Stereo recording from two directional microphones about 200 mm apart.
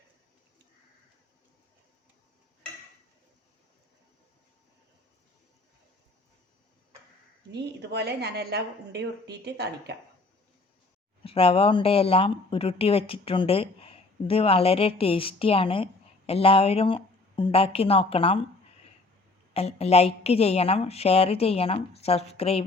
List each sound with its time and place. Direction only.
7.5 s a woman's voice: 55° right (ahead or behind)
11.2 s speech: 25° left (ahead or behind)
19.5 s a woman's voice: 30° left (ahead or behind)